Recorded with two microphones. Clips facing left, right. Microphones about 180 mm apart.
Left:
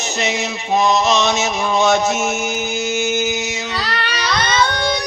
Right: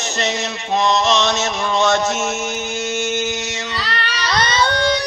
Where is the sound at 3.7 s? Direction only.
40° left (ahead or behind).